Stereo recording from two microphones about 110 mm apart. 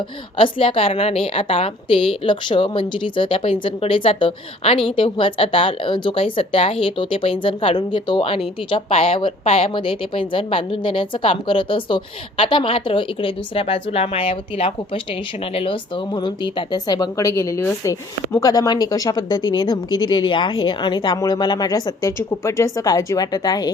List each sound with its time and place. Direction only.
0.3 s a woman's voice: 55° left (ahead or behind); by 18.3 s 25° left (ahead or behind)
18.3 s speech: 35° left (ahead or behind)